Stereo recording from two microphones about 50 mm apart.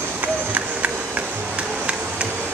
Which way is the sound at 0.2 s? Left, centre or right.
Right.